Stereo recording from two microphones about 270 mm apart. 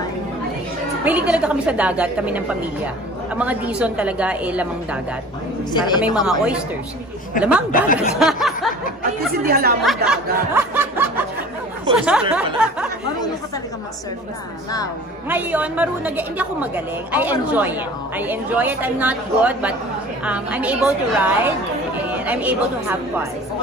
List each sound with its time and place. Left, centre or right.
1.0 s a woman's voice: centre
5.7 s a woman's voice: centre
6.2 s a woman's voice: centre
7.7 s speech: left
8.1 s snicker: centre
9.5 s speech: right
9.8 s a sound: centre
11.9 s a woman's voice: centre
15.2 s a woman's voice: centre